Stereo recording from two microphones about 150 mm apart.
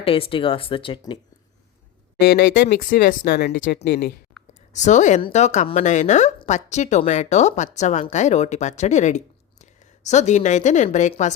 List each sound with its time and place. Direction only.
0.0 s speech: 40° left (ahead or behind)
2.1 s speech: 85° left
4.7 s speech: 55° left (ahead or behind)